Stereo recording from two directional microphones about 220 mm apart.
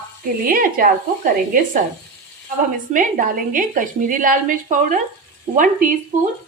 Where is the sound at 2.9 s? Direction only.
35° right (ahead or behind).